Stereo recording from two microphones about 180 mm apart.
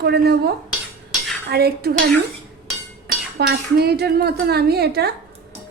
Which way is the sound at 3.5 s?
60° right (ahead or behind).